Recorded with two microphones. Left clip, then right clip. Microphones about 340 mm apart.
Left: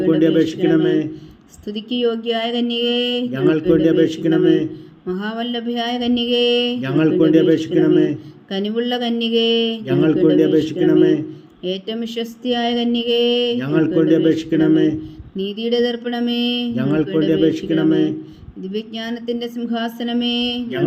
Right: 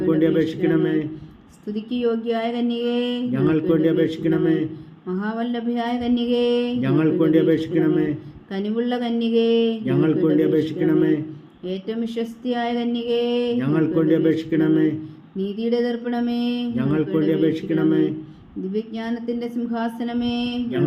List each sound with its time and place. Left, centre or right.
0.1 s a man's voice: centre
1.6 s mantra: left
3.3 s a man's voice: centre
5.0 s mantra: left
6.8 s a man's voice: centre
8.5 s mantra: left
9.8 s a man's voice: centre
11.6 s mantra: left
13.6 s a man's voice: centre
15.4 s mantra: left
16.7 s a man's voice: centre
18.6 s mantra: left